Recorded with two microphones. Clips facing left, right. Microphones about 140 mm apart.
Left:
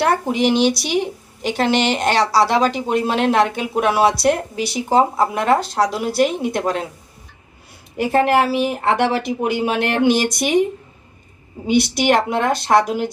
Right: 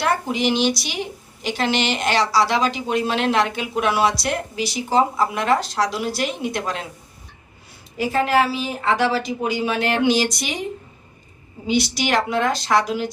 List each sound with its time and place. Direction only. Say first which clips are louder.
0.0 s speech: left 4 dB; 55° left (ahead or behind)
7.9 s speech: left 3 dB; 60° left (ahead or behind)
11.6 s speech: left 5 dB; 55° left (ahead or behind)